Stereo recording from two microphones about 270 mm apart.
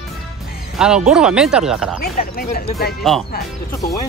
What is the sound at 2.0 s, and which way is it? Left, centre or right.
Speech, left.